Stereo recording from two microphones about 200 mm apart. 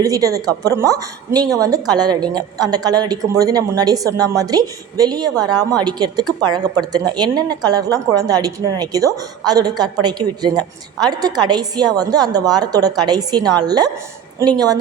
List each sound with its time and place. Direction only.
0.0 s a woman's voice: 15° right (ahead or behind)